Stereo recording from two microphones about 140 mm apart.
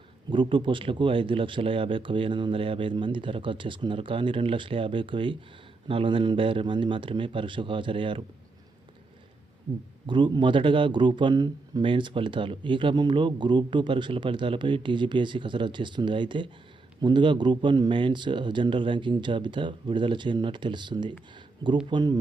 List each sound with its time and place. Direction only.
0.3 s speech: 40° right (ahead or behind)
10.1 s speech: 35° right (ahead or behind)